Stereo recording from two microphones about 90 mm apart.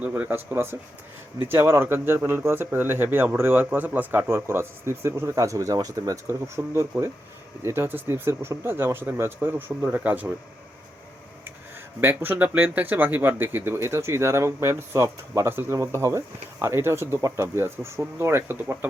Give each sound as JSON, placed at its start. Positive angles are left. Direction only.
{"t": 0.0, "sound": "speech", "side_deg": -20}
{"t": 11.9, "sound": "speech", "side_deg": -20}